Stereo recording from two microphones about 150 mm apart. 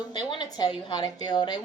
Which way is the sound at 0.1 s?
30° left (ahead or behind).